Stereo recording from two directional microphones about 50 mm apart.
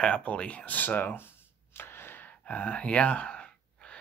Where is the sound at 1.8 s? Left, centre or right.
Left.